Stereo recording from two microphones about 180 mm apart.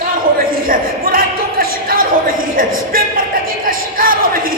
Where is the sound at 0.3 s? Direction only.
55° right (ahead or behind).